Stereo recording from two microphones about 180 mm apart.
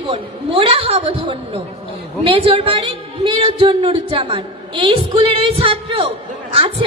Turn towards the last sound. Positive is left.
turn(degrees=-30)  # may be behind; listen again after turning